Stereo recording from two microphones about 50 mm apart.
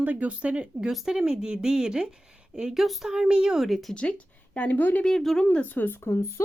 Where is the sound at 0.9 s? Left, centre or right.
Centre.